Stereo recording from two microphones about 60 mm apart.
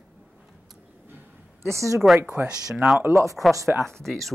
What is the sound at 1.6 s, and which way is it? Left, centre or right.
Speech, right.